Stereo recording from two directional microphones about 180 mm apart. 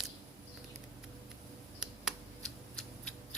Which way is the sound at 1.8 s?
Centre (ahead or behind).